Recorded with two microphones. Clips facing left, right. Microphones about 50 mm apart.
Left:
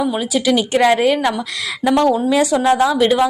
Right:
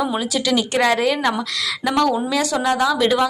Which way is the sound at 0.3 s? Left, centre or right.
Centre.